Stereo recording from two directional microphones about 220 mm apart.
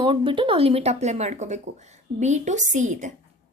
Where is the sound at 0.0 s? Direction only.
20° right (ahead or behind).